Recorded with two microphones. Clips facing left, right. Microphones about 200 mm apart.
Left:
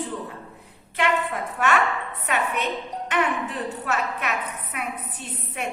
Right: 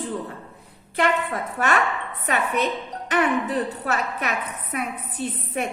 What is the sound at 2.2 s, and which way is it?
A woman's voice, 35° right (ahead or behind).